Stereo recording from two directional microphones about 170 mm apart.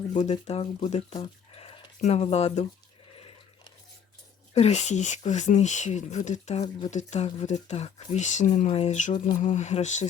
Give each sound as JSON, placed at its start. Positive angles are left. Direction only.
{"t": 0.1, "sound": "speech", "side_deg": 40}
{"t": 3.2, "sound": "a sound", "side_deg": 30}
{"t": 4.5, "sound": "speech", "side_deg": 40}